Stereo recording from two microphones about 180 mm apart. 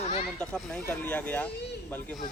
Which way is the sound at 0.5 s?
5° left (ahead or behind).